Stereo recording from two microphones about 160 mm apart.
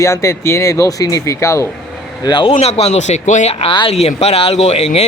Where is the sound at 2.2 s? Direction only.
30° left (ahead or behind); by 3.5 s 45° left (ahead or behind).